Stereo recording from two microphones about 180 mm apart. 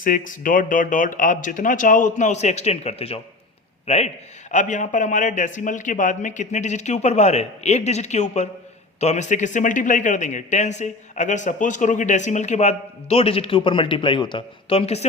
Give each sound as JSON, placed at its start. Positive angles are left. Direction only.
{"t": 0.0, "sound": "a man's voice", "side_deg": 50}